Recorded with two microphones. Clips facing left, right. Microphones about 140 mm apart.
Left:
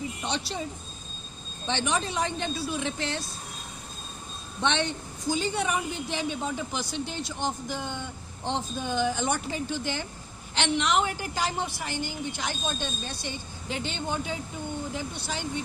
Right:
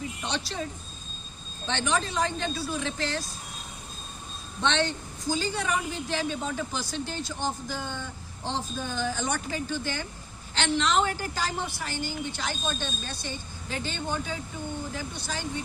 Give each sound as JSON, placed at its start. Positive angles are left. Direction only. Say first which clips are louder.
{"t": 0.3, "sound": "speech", "louder": "left 1 dB", "side_deg": 20}
{"t": 1.6, "sound": "speech", "louder": "even", "side_deg": 20}
{"t": 5.3, "sound": "a woman's voice", "louder": "left 1 dB", "side_deg": 25}